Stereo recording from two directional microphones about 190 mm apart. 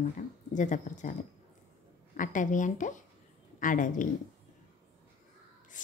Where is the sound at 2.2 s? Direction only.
40° left (ahead or behind).